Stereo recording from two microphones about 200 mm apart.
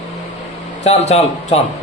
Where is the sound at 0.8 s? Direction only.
35° left (ahead or behind).